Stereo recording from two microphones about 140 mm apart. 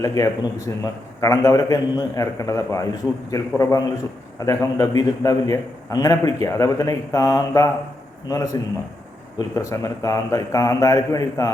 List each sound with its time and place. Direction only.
0.0 s a man's voice: 25° left (ahead or behind)
9.6 s a man's voice: 25° left (ahead or behind)